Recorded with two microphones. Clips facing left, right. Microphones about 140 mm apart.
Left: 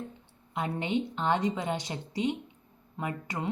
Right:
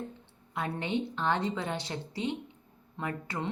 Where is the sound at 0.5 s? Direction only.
15° left (ahead or behind).